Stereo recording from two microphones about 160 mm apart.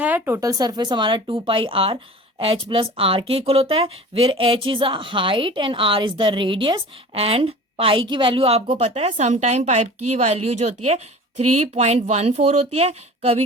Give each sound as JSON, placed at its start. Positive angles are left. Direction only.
{"t": 0.0, "sound": "speech", "side_deg": -10}